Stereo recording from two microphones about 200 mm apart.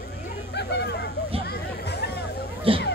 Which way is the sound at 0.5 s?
55° left (ahead or behind).